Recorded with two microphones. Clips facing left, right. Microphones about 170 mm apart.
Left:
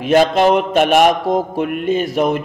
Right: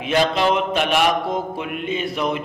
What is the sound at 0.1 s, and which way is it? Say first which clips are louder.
Mantra: left 6 dB; 45° left (ahead or behind).